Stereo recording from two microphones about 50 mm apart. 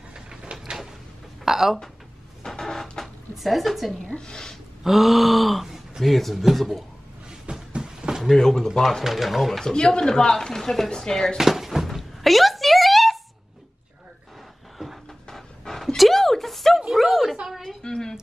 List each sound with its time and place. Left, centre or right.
0.1 s sliding door: centre
1.4 s speech: centre
2.4 s printer: centre
3.3 s speech: centre
4.0 s speech: centre
4.8 s speech: centre
7.7 s a sound: centre
8.2 s speech: centre
9.0 s speech: centre
11.3 s a sound: centre
15.0 s pant: centre
16.9 s a sound: centre
17.8 s a sound: centre